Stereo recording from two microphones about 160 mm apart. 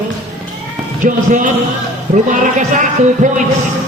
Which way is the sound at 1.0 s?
50° right (ahead or behind).